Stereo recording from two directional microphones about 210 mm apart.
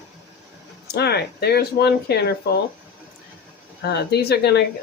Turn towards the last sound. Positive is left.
turn(degrees=50)  # may be behind; listen again after turning